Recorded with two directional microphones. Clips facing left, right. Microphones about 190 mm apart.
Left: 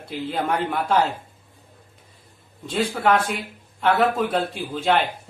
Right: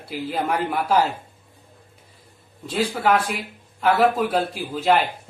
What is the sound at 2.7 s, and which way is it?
Speech, centre (ahead or behind).